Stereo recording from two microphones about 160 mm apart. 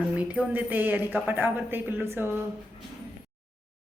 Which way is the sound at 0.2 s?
10° right (ahead or behind).